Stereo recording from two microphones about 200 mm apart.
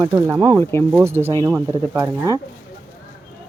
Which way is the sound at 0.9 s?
10° right (ahead or behind).